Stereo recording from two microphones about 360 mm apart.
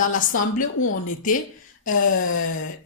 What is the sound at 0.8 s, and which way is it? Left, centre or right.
Speech, left.